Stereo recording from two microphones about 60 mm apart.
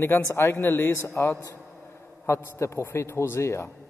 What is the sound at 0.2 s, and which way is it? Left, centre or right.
Speech, left.